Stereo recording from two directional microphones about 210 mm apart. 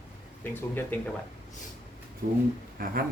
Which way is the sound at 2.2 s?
40° right (ahead or behind).